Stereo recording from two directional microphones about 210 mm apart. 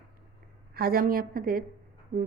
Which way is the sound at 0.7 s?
45° right (ahead or behind).